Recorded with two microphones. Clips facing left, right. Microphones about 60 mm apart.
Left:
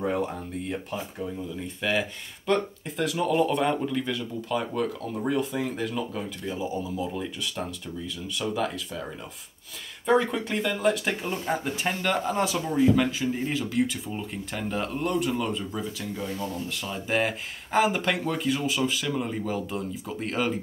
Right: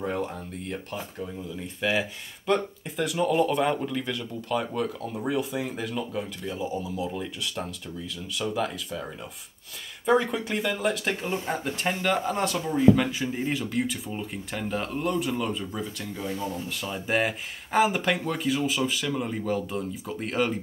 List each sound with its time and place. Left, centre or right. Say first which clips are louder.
0.0 s speech: left 2 dB; centre